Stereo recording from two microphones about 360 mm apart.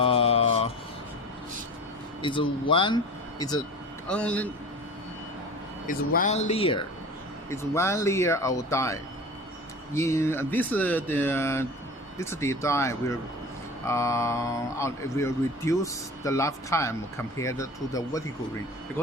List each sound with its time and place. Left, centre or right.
0.0 s vehicle: centre
2.2 s a man's voice: centre
5.9 s speech: left